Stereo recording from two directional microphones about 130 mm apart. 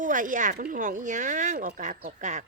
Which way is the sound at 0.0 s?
85° right.